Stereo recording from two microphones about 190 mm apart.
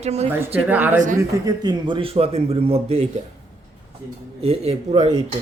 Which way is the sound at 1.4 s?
20° right (ahead or behind).